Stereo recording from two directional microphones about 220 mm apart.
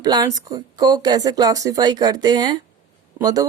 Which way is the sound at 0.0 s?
15° right (ahead or behind).